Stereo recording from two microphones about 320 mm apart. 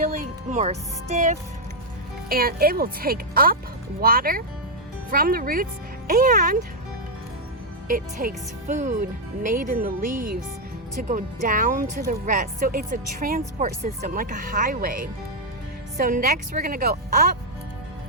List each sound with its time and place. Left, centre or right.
0.0 s speech: right
7.9 s speech: right